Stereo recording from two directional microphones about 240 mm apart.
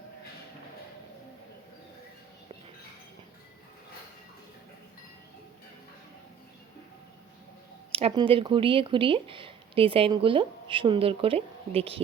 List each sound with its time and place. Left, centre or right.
7.9 s speech: right